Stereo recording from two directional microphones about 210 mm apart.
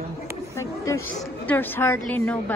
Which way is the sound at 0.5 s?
15° left (ahead or behind).